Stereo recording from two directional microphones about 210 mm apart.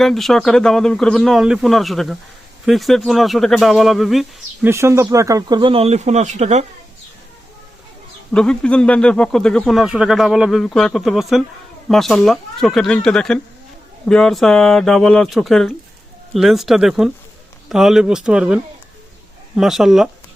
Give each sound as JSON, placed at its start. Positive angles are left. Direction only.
{"t": 0.0, "sound": "speech", "side_deg": 0}
{"t": 4.7, "sound": "speech", "side_deg": -10}
{"t": 8.3, "sound": "speech", "side_deg": 5}